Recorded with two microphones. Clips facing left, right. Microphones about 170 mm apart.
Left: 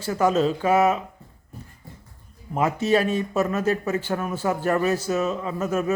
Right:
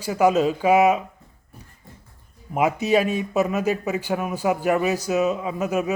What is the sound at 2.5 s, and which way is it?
Speech, 15° right (ahead or behind).